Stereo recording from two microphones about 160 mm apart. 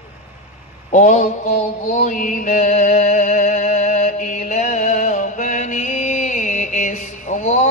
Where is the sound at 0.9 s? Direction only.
50° left (ahead or behind).